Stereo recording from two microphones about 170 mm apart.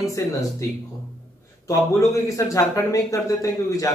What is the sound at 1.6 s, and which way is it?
Speech, 20° left (ahead or behind).